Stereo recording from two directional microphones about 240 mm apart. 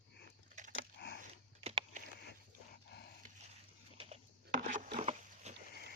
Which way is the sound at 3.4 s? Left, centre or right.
Right.